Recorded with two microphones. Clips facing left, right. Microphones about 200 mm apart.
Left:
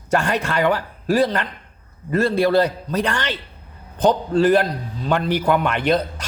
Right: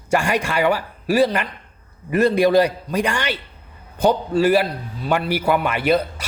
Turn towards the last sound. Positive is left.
turn(degrees=-5)  # may be behind; listen again after turning